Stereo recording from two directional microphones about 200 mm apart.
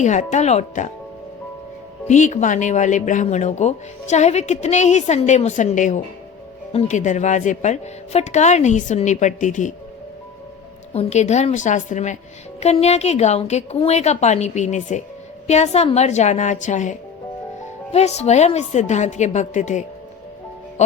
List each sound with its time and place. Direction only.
0.0 s speech: 35° left (ahead or behind)
2.0 s speech: 35° left (ahead or behind)
10.9 s speech: 35° left (ahead or behind)